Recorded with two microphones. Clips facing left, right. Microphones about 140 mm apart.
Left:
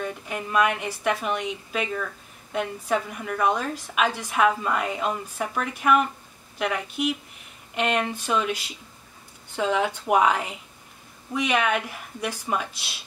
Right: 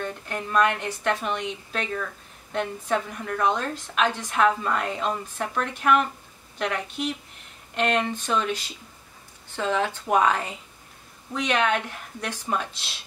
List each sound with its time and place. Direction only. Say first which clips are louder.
0.0 s a woman's voice: even; 5° left (ahead or behind)